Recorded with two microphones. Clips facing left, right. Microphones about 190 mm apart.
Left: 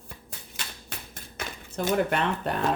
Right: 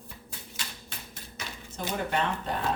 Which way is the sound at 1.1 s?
50° left (ahead or behind).